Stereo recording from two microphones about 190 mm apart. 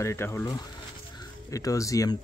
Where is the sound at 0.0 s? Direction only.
15° left (ahead or behind).